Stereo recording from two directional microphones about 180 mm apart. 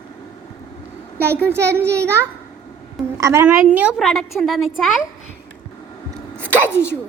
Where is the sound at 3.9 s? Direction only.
Centre (ahead or behind).